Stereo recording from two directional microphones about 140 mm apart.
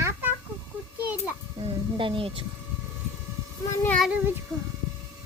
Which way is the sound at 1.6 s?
40° right (ahead or behind).